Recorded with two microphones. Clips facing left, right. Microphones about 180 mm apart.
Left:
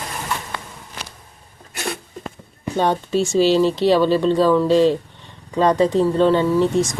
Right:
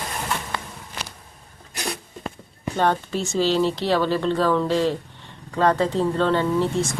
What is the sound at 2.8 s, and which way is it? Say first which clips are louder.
Speech: left 4 dB; 15° left (ahead or behind).